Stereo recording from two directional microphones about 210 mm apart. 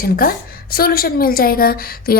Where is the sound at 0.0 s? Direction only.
45° left (ahead or behind).